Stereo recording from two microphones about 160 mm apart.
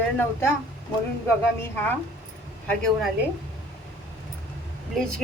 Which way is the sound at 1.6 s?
15° left (ahead or behind).